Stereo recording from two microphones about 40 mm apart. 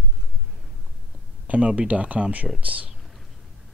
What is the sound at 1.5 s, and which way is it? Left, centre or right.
Speech, right.